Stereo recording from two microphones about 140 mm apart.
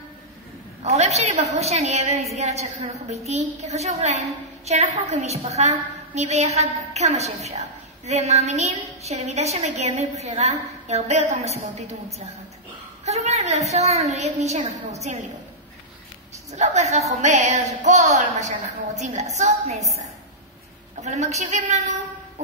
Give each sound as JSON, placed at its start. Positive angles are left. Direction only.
{"t": 0.8, "sound": "a woman's voice", "side_deg": -50}
{"t": 13.0, "sound": "a woman's voice", "side_deg": -50}
{"t": 16.5, "sound": "a woman's voice", "side_deg": -55}
{"t": 21.0, "sound": "a woman's voice", "side_deg": -55}